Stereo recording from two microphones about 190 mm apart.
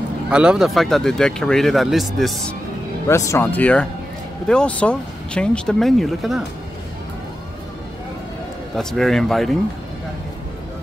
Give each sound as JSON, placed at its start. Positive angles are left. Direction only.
{"t": 0.3, "sound": "speech", "side_deg": -5}
{"t": 3.1, "sound": "speech", "side_deg": 15}
{"t": 8.7, "sound": "speech", "side_deg": 0}